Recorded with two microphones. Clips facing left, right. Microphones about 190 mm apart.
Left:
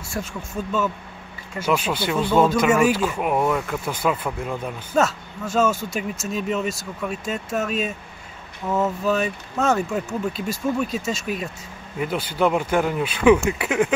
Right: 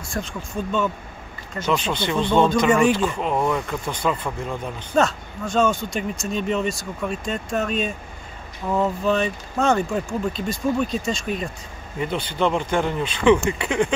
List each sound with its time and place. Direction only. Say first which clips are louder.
0.1 s speech: right 1 dB; 5° left (ahead or behind)